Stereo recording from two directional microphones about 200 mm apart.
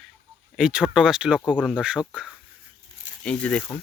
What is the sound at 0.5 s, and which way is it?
Speech, 5° right (ahead or behind).